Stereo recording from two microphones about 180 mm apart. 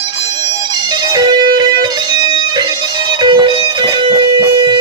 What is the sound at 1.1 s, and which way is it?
Music, 25° right (ahead or behind).